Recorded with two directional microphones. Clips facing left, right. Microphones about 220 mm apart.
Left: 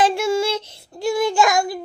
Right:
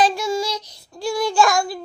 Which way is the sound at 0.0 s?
25° left (ahead or behind).